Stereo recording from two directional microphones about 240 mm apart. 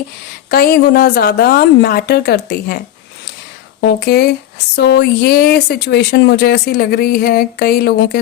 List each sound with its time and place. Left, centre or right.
0.5 s speech: left